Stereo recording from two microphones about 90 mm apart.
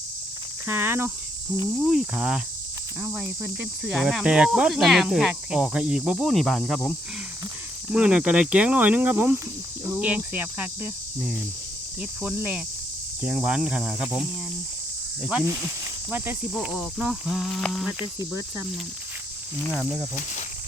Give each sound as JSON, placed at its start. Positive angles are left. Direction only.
{"t": 0.7, "sound": "cricket", "side_deg": -25}
{"t": 1.8, "sound": "speech", "side_deg": -5}
{"t": 3.0, "sound": "cricket", "side_deg": -20}
{"t": 3.8, "sound": "speech", "side_deg": -10}
{"t": 7.9, "sound": "speech", "side_deg": -10}
{"t": 16.6, "sound": "a sound", "side_deg": -5}